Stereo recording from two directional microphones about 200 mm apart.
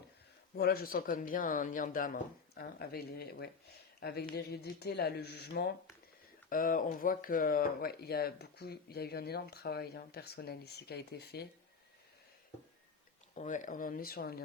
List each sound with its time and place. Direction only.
0.5 s speech: 50° left (ahead or behind)
6.5 s speech: 45° left (ahead or behind)
13.3 s speech: 35° left (ahead or behind)